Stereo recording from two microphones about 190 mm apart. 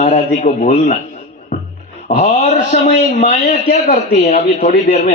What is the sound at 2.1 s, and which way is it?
Speech, 45° left (ahead or behind).